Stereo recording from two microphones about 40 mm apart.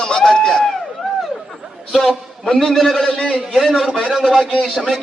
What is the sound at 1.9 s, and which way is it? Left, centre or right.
A man's voice, centre.